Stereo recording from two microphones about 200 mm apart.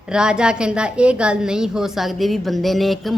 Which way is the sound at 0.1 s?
5° right (ahead or behind).